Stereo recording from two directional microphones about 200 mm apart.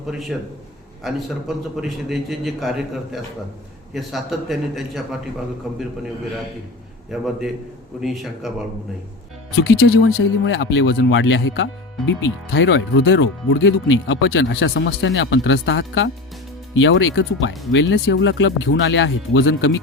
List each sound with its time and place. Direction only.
0.1 s a man's voice: centre (ahead or behind)
7.1 s a man's voice: centre (ahead or behind)
9.6 s speech: 90° left
10.2 s speech: 65° left (ahead or behind)